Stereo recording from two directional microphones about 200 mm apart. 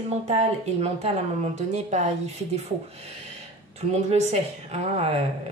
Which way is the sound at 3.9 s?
35° right (ahead or behind).